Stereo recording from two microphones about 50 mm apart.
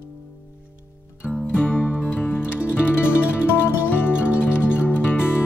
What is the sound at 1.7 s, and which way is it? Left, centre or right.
Music, centre.